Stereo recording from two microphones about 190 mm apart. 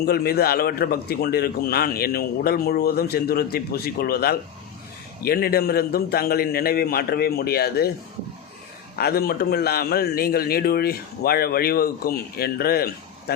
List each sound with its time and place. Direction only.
0.0 s a man's voice: 55° left (ahead or behind)
9.0 s a man's voice: 55° left (ahead or behind)